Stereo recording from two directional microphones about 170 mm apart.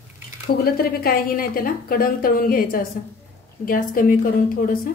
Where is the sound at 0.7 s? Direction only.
60° left (ahead or behind).